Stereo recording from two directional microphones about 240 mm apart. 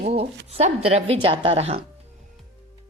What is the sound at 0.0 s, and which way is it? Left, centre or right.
Speech, right.